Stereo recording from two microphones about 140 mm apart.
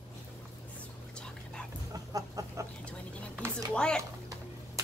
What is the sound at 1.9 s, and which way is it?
Chicken, 25° right (ahead or behind).